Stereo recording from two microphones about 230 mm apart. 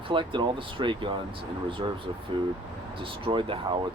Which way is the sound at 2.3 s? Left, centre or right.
Right.